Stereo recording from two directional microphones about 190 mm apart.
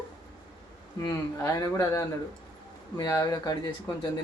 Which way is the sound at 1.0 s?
15° left (ahead or behind).